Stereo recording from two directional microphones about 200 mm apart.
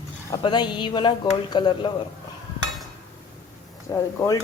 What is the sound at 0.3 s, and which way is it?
Speech, 20° left (ahead or behind).